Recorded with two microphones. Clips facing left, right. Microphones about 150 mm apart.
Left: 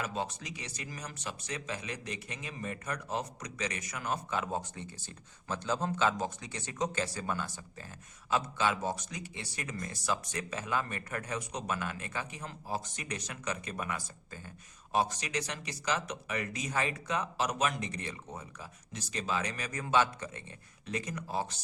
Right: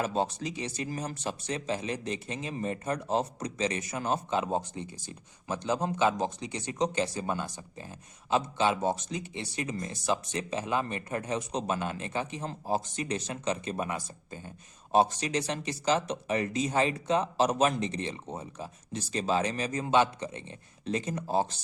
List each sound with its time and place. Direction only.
0.0 s speech: 30° right (ahead or behind)